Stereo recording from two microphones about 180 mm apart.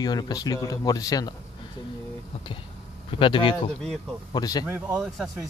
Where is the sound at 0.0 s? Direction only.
20° left (ahead or behind).